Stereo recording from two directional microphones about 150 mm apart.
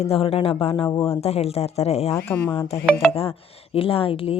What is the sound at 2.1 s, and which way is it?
Speech, 10° left (ahead or behind).